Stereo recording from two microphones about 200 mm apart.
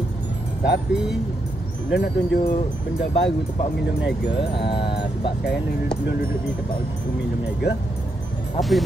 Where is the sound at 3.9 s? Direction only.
55° left (ahead or behind).